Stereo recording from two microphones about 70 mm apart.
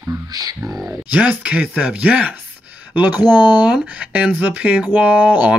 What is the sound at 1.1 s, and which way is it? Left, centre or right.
Speech, right.